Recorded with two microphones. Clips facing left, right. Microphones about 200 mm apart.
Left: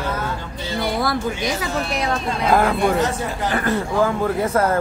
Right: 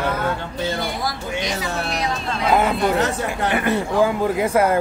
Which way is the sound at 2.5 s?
5° right (ahead or behind).